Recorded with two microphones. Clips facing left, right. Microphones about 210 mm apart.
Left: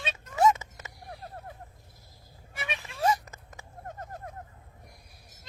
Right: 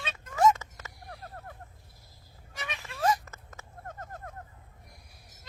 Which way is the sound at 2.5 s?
15° left (ahead or behind).